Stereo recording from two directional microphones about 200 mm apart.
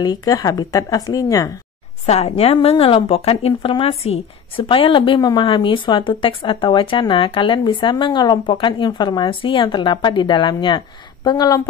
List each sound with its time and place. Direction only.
0.0 s speech: 20° left (ahead or behind)
2.0 s a woman's voice: 30° left (ahead or behind)